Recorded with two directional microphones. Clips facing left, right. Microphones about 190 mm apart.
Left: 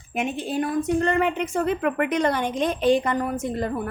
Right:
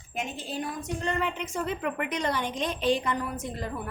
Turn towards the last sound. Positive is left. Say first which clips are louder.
# left 8 dB
turn(degrees=50)  # may be behind; listen again after turning